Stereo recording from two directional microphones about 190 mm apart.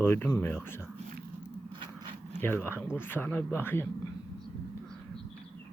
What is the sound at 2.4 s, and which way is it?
Speech, 10° left (ahead or behind).